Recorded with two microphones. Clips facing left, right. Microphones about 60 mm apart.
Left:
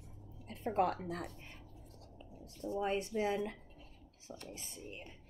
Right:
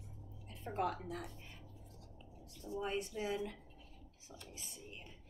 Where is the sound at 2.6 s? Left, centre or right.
Left.